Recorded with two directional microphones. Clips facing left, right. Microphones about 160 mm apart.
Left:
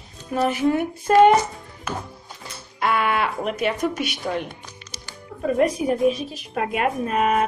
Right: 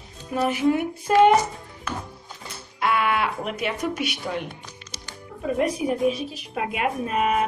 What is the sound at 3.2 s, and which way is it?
Speech, 45° left (ahead or behind).